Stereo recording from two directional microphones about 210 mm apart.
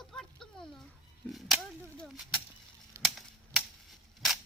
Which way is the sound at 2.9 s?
15° right (ahead or behind).